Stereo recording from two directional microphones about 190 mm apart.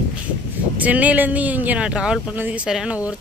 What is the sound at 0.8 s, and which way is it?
Speech, 10° right (ahead or behind).